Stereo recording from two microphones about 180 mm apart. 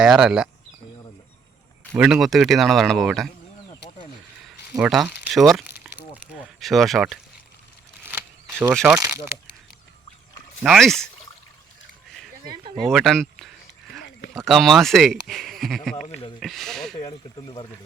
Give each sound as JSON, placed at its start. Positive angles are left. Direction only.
{"t": 0.0, "sound": "speech", "side_deg": -5}
{"t": 1.9, "sound": "speech", "side_deg": -10}
{"t": 4.4, "sound": "crumpling", "side_deg": 0}
{"t": 8.7, "sound": "speech", "side_deg": 0}
{"t": 10.6, "sound": "speech", "side_deg": 0}
{"t": 12.5, "sound": "speech", "side_deg": -25}
{"t": 12.9, "sound": "speech", "side_deg": 0}
{"t": 17.0, "sound": "speech", "side_deg": 25}